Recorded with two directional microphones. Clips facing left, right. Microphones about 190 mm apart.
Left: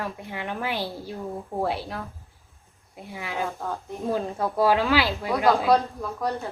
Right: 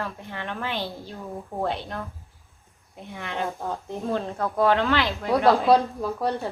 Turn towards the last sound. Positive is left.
turn(degrees=-30)  # may be behind; listen again after turning